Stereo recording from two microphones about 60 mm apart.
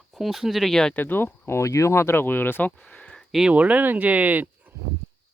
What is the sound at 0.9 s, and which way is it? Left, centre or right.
Speech, left.